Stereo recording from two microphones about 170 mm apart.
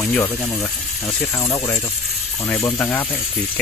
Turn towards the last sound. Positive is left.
turn(degrees=10)  # may be behind; listen again after turning